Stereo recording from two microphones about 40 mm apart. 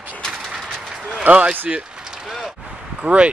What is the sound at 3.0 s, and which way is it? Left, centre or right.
Speech, right.